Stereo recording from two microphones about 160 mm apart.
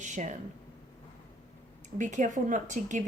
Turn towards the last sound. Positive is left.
turn(degrees=-50)  # may be behind; listen again after turning